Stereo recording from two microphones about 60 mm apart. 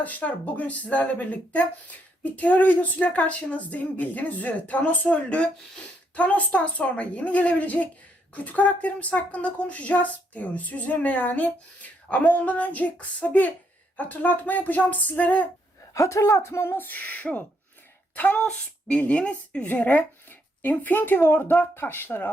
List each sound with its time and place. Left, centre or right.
0.0 s speech: left
15.9 s speech: left